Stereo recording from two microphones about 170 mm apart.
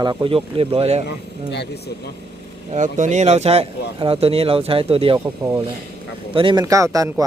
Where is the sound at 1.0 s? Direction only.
80° left.